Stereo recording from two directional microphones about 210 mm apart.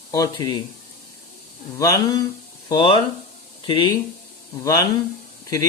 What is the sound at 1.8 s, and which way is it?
Speech, 15° left (ahead or behind).